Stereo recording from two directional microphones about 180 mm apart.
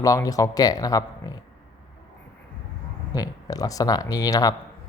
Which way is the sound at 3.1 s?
20° left (ahead or behind).